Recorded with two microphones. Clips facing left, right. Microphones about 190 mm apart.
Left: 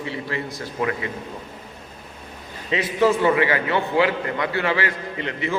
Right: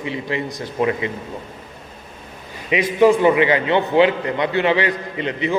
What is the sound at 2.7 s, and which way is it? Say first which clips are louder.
A man's voice: right 5 dB; 15° right (ahead or behind).